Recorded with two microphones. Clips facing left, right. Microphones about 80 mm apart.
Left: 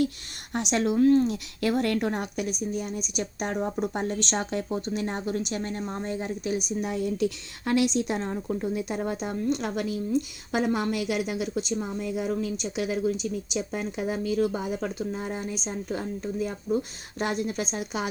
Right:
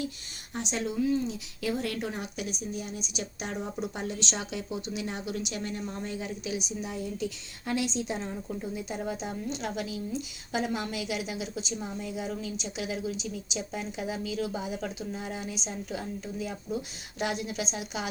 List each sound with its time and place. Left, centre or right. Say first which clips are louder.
0.5 s speech: left 7 dB; left